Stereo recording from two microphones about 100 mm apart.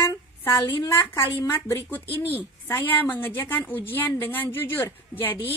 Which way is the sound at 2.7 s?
20° left (ahead or behind).